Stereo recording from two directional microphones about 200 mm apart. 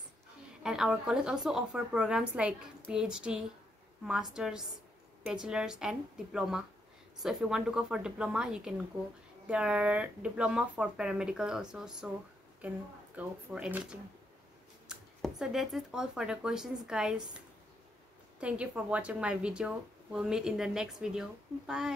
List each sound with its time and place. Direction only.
0.7 s speech: 5° right (ahead or behind)
18.4 s speech: 5° right (ahead or behind)